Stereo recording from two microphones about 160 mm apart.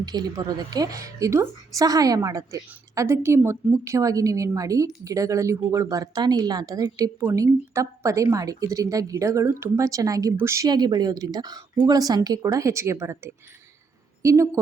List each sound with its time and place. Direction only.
0.0 s a woman's voice: 25° right (ahead or behind)